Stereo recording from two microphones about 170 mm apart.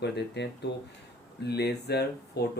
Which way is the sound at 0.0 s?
80° left.